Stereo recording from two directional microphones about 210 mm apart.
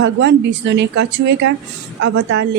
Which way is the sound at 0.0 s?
60° right (ahead or behind).